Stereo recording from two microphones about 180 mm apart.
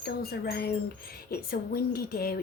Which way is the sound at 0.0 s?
60° left (ahead or behind).